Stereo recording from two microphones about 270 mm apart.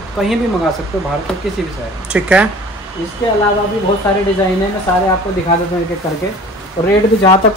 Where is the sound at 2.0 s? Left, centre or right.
Centre.